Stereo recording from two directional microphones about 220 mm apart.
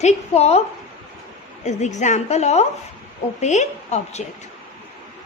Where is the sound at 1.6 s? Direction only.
30° left (ahead or behind).